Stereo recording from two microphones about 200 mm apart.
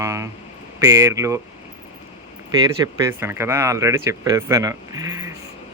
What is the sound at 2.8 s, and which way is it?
Speech, 15° right (ahead or behind).